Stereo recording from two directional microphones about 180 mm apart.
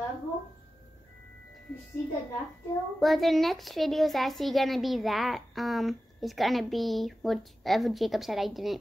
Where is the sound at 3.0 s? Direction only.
Centre (ahead or behind).